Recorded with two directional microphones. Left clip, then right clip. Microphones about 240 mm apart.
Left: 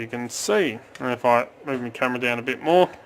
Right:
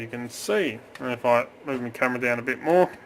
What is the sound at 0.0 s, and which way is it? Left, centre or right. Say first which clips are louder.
Speech: left 4 dB; centre.